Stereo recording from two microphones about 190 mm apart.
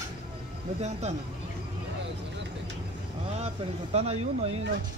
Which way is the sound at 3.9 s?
35° right (ahead or behind).